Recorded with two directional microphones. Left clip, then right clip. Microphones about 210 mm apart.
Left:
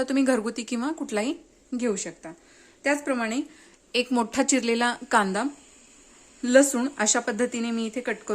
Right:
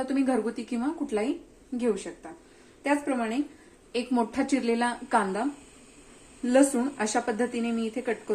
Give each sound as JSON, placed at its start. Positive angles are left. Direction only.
{"t": 0.0, "sound": "speech", "side_deg": 50}
{"t": 2.8, "sound": "speech", "side_deg": 50}